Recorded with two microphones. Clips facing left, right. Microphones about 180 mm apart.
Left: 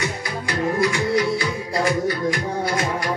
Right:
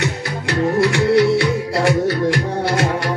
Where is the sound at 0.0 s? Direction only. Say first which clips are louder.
Right 4 dB; 70° right (ahead or behind).